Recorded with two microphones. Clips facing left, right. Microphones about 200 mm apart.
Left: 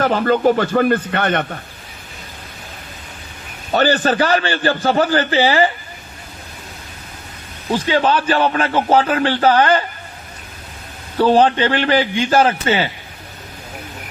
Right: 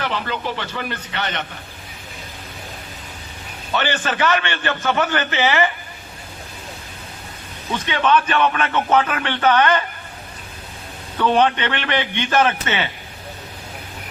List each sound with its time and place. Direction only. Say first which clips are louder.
0.0 s speech: left 11 dB; 45° left (ahead or behind)
3.7 s a man's voice: left 7 dB; 40° left (ahead or behind)
7.7 s a man's voice: left 3 dB; 30° left (ahead or behind)
11.2 s a man's voice: left 4 dB; 30° left (ahead or behind)